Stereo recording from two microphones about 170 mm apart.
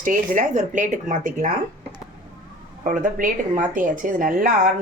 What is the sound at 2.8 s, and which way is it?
Speech, 50° right (ahead or behind).